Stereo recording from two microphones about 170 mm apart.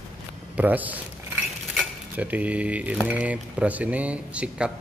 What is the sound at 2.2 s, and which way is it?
Speech, 10° right (ahead or behind).